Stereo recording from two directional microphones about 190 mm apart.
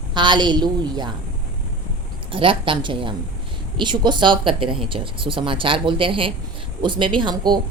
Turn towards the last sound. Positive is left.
turn(degrees=-25)  # may be behind; listen again after turning